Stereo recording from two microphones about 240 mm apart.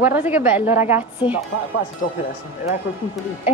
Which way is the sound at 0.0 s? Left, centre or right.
Centre.